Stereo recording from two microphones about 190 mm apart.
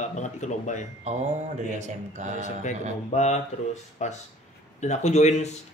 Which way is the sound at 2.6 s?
40° left (ahead or behind).